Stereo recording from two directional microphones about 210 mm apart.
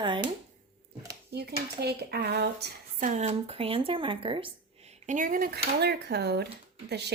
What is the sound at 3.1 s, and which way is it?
A woman's voice, 30° right (ahead or behind).